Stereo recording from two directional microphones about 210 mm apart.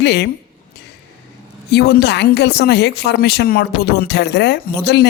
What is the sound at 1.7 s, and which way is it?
A woman's voice, 50° left (ahead or behind).